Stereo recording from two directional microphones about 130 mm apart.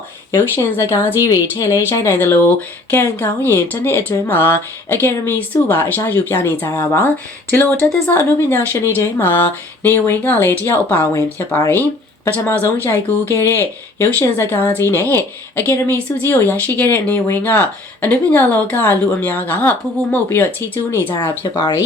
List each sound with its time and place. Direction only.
0.3 s speech: 20° left (ahead or behind)